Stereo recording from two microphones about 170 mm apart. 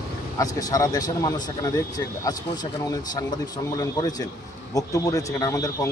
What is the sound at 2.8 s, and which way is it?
Speech, 20° left (ahead or behind).